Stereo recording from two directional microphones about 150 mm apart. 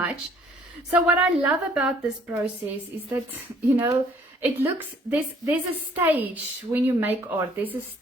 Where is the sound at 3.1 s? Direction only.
15° right (ahead or behind).